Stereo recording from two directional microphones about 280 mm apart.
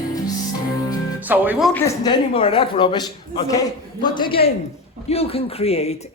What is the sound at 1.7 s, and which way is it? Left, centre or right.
A man's voice, centre.